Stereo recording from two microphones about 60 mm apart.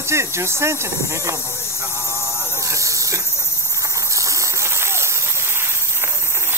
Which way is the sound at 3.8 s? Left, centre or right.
Right.